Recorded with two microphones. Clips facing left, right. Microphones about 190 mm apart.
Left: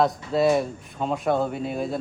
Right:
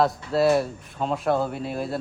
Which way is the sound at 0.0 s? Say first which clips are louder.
Even; centre (ahead or behind).